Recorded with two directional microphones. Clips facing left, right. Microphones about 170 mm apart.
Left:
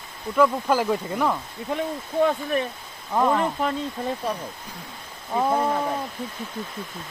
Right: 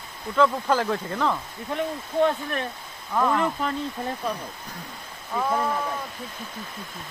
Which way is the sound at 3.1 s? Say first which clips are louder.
Left 2 dB; 20° left (ahead or behind).